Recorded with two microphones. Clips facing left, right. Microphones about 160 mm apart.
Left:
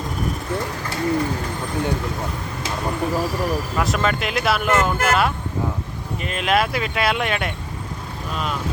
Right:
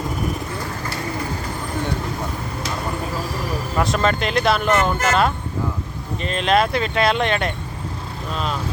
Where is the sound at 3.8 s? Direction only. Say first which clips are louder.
Right 4 dB; 5° left (ahead or behind).